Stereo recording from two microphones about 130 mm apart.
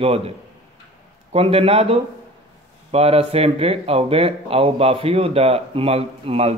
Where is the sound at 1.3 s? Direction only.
50° right (ahead or behind).